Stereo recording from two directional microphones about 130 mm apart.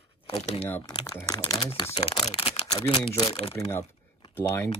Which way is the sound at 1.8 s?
50° left (ahead or behind).